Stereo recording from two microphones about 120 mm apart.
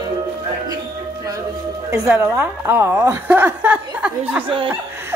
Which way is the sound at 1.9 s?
20° right (ahead or behind).